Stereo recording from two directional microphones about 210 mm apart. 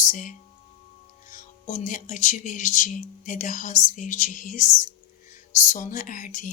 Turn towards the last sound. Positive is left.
turn(degrees=40)  # may be behind; listen again after turning